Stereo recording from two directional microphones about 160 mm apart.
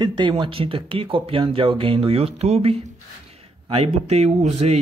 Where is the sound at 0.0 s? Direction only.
30° right (ahead or behind).